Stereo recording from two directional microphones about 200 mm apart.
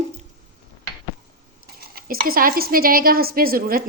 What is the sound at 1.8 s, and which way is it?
A woman's voice, 50° right (ahead or behind).